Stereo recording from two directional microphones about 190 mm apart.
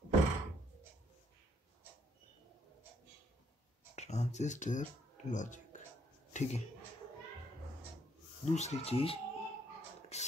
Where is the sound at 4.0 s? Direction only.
35° left (ahead or behind).